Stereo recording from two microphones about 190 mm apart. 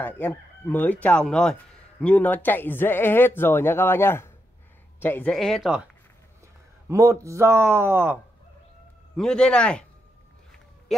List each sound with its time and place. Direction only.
0.0 s chicken: 10° left (ahead or behind)
5.0 s speech: 10° left (ahead or behind)
6.9 s speech: 15° right (ahead or behind)
9.1 s speech: 5° left (ahead or behind)